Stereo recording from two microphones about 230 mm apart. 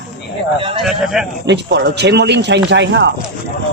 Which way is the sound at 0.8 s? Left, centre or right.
Centre.